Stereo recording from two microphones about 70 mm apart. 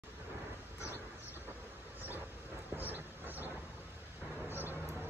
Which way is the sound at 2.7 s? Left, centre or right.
Right.